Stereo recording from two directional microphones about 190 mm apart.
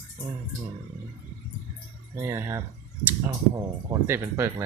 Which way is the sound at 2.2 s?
15° right (ahead or behind).